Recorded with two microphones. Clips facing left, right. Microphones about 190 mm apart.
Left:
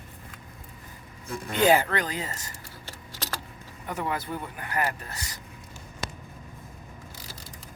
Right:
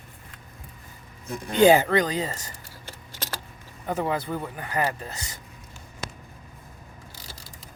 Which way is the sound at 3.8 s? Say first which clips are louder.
Right 4 dB; 30° right (ahead or behind).